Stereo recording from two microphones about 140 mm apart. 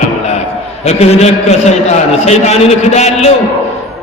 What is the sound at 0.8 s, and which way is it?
A man's voice, 50° left (ahead or behind).